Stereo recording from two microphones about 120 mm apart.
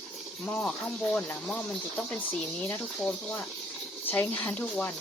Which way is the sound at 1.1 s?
10° left (ahead or behind).